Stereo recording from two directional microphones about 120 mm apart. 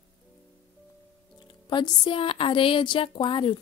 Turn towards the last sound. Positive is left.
turn(degrees=40)  # may be behind; listen again after turning